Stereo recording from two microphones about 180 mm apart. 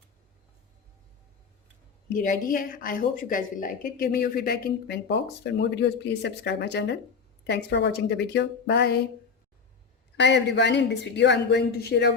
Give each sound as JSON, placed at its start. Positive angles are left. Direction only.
{"t": 2.0, "sound": "a woman's voice", "side_deg": 45}
{"t": 10.2, "sound": "speech", "side_deg": 75}